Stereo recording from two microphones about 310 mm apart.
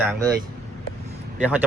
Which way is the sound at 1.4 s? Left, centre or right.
Centre.